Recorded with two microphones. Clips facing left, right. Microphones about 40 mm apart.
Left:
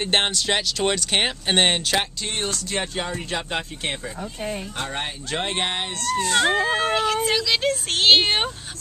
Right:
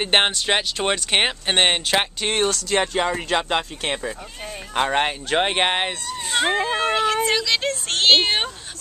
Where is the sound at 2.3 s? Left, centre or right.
Right.